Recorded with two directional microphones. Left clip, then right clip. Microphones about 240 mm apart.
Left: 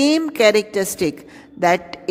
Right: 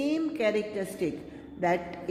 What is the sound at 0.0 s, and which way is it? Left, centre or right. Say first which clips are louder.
A woman's voice: left 13 dB; left.